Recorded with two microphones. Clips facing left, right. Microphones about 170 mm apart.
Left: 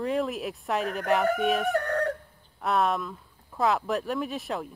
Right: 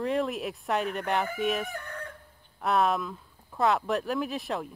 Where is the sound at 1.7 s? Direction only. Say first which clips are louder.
Left 13 dB; 70° left (ahead or behind).